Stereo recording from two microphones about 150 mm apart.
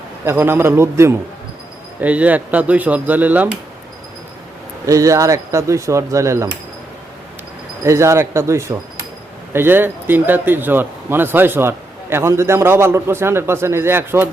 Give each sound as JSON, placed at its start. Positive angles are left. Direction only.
{"t": 0.3, "sound": "speech", "side_deg": -15}
{"t": 4.9, "sound": "speech", "side_deg": -20}
{"t": 7.9, "sound": "speech", "side_deg": -20}